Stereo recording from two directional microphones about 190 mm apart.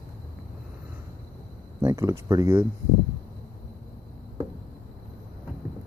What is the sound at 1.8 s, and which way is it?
Speech, 15° right (ahead or behind).